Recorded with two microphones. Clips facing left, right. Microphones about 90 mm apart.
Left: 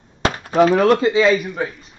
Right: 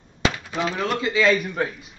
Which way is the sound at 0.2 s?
45° left (ahead or behind).